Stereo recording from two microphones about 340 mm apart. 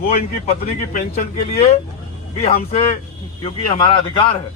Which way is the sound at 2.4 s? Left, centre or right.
Left.